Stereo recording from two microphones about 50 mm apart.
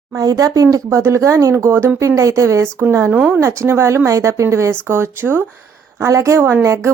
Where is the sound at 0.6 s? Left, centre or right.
Right.